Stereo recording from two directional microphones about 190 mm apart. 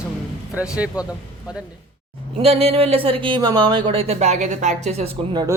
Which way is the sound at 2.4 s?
30° right (ahead or behind).